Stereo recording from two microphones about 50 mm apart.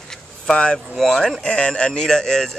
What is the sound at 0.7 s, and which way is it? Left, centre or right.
Speech, centre.